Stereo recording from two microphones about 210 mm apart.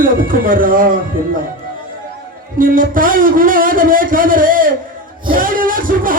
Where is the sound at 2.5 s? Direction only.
40° right (ahead or behind).